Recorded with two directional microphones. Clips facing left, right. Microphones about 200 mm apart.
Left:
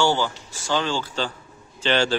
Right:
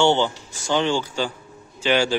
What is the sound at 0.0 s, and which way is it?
A man's voice, 20° right (ahead or behind).